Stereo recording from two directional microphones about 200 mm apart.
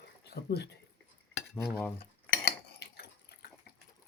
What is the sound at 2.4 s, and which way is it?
Cutlery, 55° left (ahead or behind).